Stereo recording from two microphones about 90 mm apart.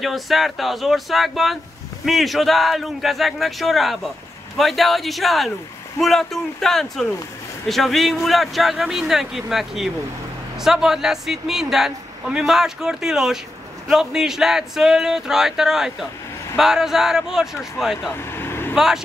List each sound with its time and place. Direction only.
0.0 s a man's voice: centre (ahead or behind)
18.1 s vehicle: 25° left (ahead or behind)